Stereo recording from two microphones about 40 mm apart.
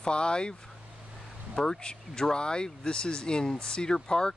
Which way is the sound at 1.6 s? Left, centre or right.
Centre.